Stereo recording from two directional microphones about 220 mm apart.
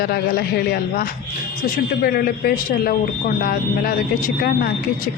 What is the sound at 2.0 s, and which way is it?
A woman's voice, 45° left (ahead or behind).